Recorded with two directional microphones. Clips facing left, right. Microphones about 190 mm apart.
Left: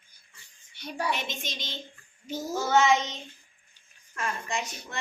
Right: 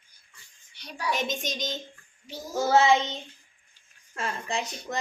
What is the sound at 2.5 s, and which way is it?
Speech, 35° right (ahead or behind).